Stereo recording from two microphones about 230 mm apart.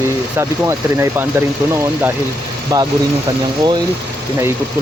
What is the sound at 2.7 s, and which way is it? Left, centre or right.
Speech, centre.